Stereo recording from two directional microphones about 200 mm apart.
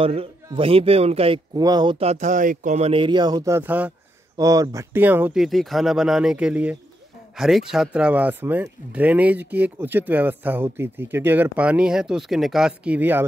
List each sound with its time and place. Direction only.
0.0 s speech: 30° right (ahead or behind); by 13.2 s 10° right (ahead or behind)